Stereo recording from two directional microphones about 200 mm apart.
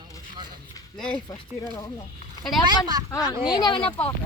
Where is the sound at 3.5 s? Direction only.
25° left (ahead or behind).